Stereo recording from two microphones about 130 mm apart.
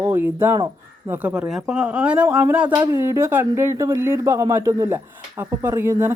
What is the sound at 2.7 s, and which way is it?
Speech, 25° right (ahead or behind).